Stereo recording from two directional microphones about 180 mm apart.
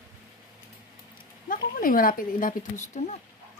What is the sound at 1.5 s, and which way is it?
Speech, 50° left (ahead or behind).